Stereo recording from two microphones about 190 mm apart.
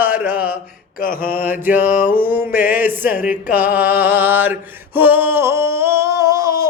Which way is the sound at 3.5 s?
10° right (ahead or behind).